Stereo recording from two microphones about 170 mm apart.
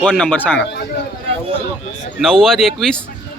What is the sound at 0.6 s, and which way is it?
Speech, 90° left.